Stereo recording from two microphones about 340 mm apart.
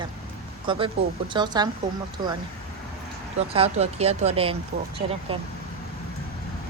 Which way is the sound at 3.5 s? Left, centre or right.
Centre.